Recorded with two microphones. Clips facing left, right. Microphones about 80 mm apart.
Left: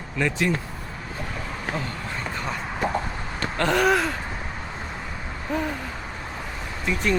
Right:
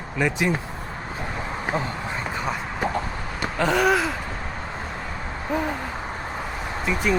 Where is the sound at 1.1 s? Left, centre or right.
Right; by 4.1 s centre.